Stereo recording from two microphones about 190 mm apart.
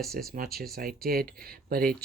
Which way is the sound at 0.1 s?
50° right (ahead or behind).